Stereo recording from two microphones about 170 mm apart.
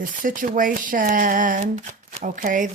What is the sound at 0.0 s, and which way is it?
Speech, 50° right (ahead or behind).